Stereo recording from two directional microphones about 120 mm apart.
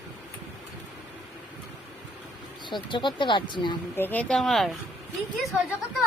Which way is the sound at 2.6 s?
40° left (ahead or behind).